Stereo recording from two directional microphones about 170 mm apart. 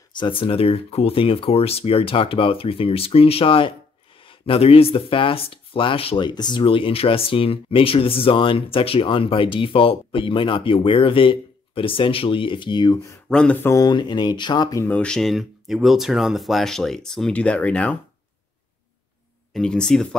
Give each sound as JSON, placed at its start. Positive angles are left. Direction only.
{"t": 0.1, "sound": "speech", "side_deg": 30}
{"t": 4.2, "sound": "a sound", "side_deg": 30}
{"t": 4.9, "sound": "speech", "side_deg": 30}
{"t": 13.3, "sound": "speech", "side_deg": 5}
{"t": 14.9, "sound": "speech", "side_deg": 5}
{"t": 19.5, "sound": "speech", "side_deg": 5}